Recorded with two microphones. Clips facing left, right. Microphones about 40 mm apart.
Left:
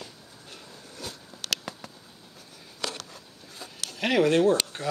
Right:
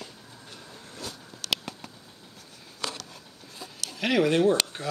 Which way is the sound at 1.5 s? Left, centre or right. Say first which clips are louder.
Right 2 dB; centre.